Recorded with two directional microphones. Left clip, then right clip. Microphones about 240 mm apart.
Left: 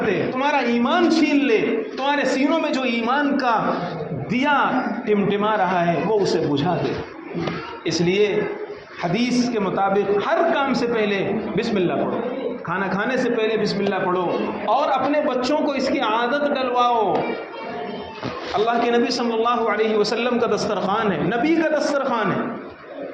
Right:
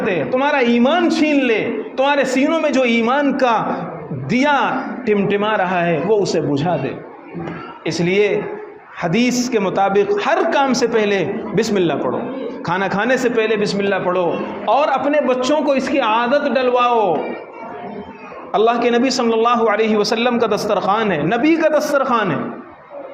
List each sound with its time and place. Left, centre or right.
0.1 s a man's voice: right
7.9 s a man's voice: right
18.5 s a man's voice: right